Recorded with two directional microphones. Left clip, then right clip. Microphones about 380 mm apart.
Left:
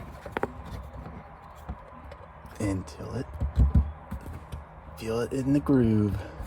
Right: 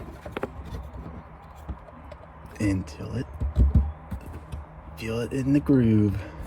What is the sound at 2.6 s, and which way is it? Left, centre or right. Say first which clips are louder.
Speech: right 4 dB; left.